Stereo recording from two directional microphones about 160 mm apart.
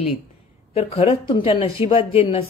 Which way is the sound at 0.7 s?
35° left (ahead or behind).